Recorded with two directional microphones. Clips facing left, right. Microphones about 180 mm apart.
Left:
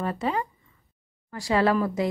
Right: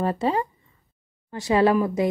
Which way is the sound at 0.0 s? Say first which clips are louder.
Right 4 dB; 30° right (ahead or behind).